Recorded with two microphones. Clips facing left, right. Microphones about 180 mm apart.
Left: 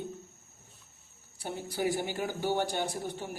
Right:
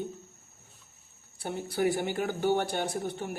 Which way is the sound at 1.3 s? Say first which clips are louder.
Right 4 dB; 60° right (ahead or behind).